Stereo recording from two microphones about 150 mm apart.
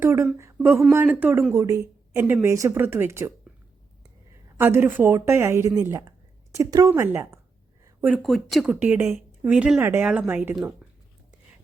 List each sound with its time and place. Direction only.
0.0 s a woman's voice: 15° right (ahead or behind)
4.5 s a woman's voice: 15° right (ahead or behind)
8.0 s a woman's voice: 5° right (ahead or behind)